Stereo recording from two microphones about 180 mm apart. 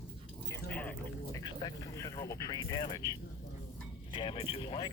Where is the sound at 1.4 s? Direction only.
20° left (ahead or behind).